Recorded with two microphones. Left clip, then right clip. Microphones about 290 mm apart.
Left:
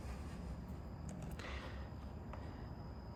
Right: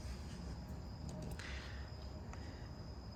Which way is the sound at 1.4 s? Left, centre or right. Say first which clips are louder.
Left 3 dB; centre.